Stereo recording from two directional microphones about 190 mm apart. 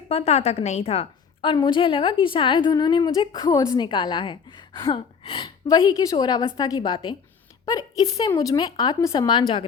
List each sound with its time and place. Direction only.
0.1 s a woman's voice: 30° left (ahead or behind)
4.9 s gasp: 30° left (ahead or behind)
5.6 s a woman's voice: 20° left (ahead or behind)